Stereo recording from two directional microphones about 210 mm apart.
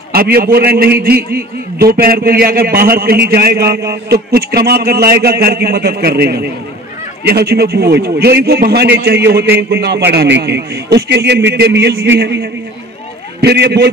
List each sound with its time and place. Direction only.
0.1 s a man's voice: 45° right (ahead or behind)